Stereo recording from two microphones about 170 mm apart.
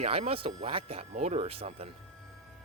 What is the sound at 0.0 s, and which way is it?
Speech, 35° right (ahead or behind).